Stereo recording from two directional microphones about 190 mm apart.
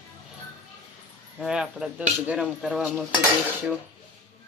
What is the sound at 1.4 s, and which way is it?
Speech, 5° right (ahead or behind).